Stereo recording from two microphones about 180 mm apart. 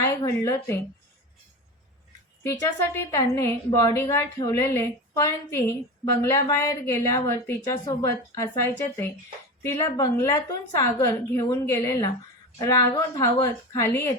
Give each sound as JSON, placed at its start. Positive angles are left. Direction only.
{"t": 0.0, "sound": "a woman's voice", "side_deg": 15}
{"t": 2.4, "sound": "a woman's voice", "side_deg": 15}